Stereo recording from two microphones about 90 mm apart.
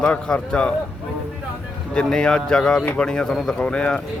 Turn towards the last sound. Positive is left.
turn(degrees=10)  # may be behind; listen again after turning